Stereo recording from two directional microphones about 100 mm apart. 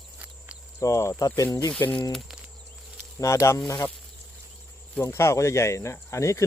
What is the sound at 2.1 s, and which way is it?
Speech, 5° right (ahead or behind).